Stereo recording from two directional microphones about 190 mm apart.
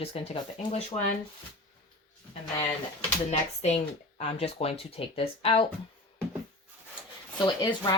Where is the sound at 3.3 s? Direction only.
35° left (ahead or behind).